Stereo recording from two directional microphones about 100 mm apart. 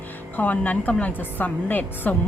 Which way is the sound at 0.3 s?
15° left (ahead or behind).